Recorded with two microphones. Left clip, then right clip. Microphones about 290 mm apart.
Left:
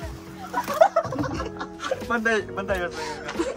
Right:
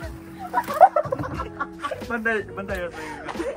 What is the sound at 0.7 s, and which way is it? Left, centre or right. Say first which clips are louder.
Fowl: right 3 dB; centre.